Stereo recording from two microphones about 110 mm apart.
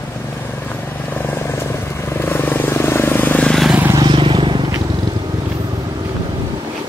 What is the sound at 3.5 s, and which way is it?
Vehicle, centre (ahead or behind).